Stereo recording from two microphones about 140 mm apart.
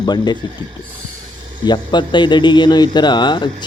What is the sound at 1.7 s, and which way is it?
Speech, 35° left (ahead or behind).